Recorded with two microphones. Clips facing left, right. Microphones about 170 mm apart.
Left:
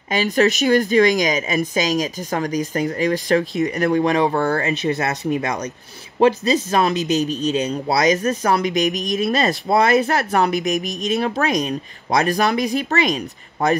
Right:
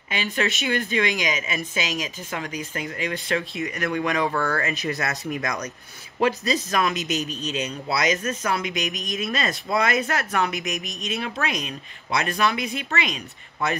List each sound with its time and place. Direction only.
0.1 s speech: 40° left (ahead or behind)